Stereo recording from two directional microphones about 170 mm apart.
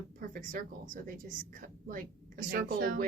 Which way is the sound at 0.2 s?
50° right (ahead or behind).